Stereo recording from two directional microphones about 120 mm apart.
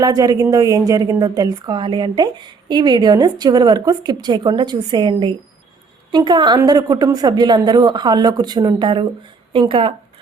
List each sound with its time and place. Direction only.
0.0 s a woman's voice: 30° right (ahead or behind); by 9.9 s 45° right (ahead or behind)